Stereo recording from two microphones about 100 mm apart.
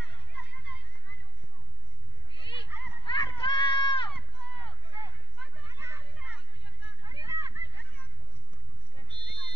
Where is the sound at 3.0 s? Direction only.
50° left (ahead or behind).